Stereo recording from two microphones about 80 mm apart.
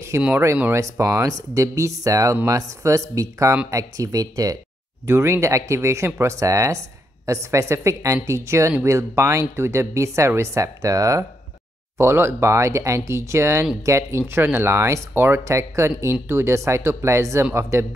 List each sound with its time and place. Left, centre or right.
0.1 s speech: right
5.0 s speech: right
12.0 s speech: right